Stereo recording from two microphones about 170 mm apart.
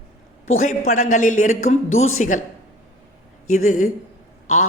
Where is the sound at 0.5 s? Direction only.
45° left (ahead or behind).